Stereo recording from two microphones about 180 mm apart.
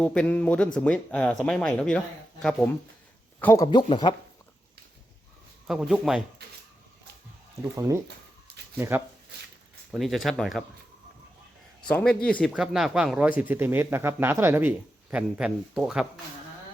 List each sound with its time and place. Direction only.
0.0 s speech: 5° left (ahead or behind)
3.4 s a man's voice: 15° left (ahead or behind)
5.6 s speech: centre (ahead or behind)
7.6 s speech: 15° right (ahead or behind)
9.9 s speech: centre (ahead or behind)
11.9 s speech: 5° left (ahead or behind)